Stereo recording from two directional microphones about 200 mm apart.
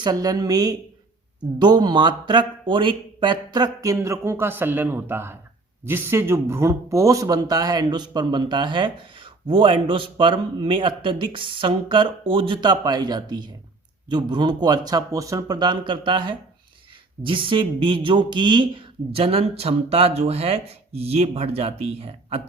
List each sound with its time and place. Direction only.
0.0 s speech: 20° right (ahead or behind)